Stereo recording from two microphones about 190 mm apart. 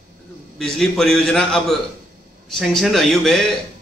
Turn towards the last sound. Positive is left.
turn(degrees=0)  # may be behind; listen again after turning